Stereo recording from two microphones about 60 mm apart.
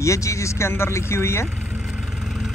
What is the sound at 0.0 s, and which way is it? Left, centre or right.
Speech, left.